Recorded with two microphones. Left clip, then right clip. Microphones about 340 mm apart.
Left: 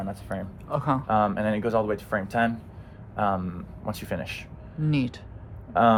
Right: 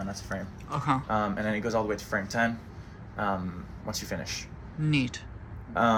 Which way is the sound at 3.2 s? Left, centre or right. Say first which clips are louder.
Left 5 dB; left.